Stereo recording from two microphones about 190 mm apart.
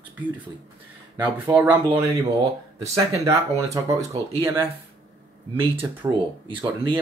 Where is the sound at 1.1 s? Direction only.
15° right (ahead or behind).